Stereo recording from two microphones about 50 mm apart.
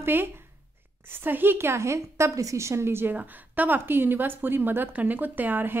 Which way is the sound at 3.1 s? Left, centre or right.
Right.